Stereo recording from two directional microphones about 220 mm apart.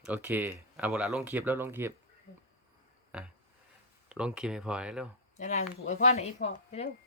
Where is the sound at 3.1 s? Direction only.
5° right (ahead or behind).